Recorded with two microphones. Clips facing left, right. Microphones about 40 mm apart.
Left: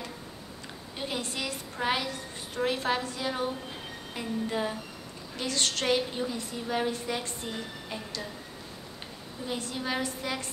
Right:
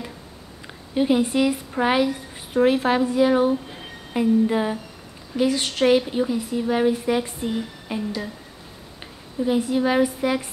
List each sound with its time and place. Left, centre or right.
0.9 s a woman's voice: centre
9.5 s a woman's voice: centre